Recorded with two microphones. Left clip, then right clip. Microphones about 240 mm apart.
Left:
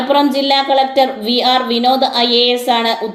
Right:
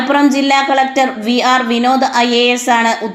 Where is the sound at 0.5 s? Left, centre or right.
Right.